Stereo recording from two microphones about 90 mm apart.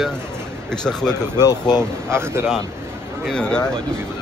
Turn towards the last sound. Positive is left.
turn(degrees=10)  # may be behind; listen again after turning